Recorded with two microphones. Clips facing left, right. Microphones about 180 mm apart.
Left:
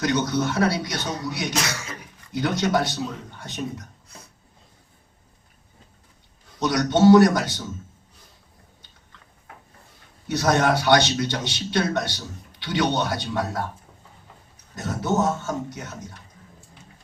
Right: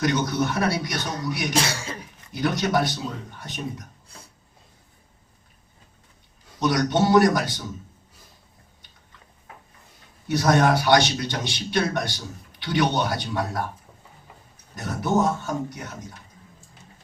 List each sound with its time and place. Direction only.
0.0 s a man's voice: 20° left (ahead or behind)
1.5 s a sound: 30° right (ahead or behind)
2.3 s a man's voice: 20° left (ahead or behind)
6.6 s a man's voice: 20° left (ahead or behind)
10.2 s a man's voice: 25° left (ahead or behind)
14.8 s a man's voice: 25° left (ahead or behind)